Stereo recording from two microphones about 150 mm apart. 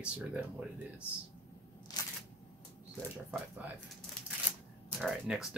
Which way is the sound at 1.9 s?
25° left (ahead or behind).